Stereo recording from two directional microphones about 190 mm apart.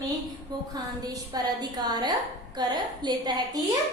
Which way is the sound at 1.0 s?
20° right (ahead or behind).